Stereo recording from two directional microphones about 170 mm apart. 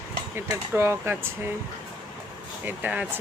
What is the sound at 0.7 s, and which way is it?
Speech, 15° right (ahead or behind).